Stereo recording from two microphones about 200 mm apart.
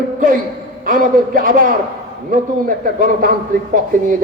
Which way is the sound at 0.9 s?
45° right (ahead or behind).